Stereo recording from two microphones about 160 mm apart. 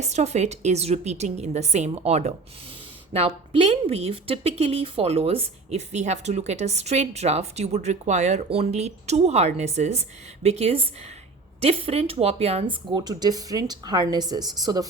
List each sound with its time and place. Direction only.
0.1 s a woman's voice: 45° right (ahead or behind); by 14.8 s 25° right (ahead or behind)